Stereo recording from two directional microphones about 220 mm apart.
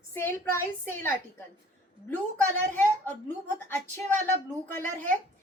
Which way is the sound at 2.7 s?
10° left (ahead or behind).